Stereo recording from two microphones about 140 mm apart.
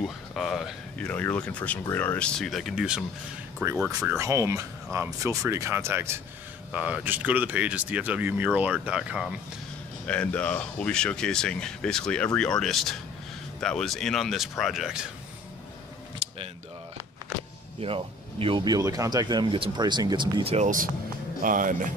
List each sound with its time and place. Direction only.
0.0 s speech: 5° left (ahead or behind)
10.0 s speech: 10° left (ahead or behind)
16.2 s a sound: 40° right (ahead or behind)
17.7 s speech: 40° right (ahead or behind)
20.5 s speech: 65° right (ahead or behind)